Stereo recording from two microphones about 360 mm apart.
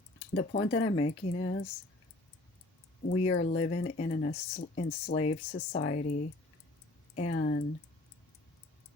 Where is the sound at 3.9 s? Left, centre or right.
Centre.